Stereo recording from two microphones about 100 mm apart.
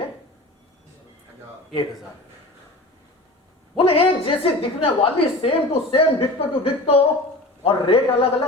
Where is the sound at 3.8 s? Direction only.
70° left (ahead or behind).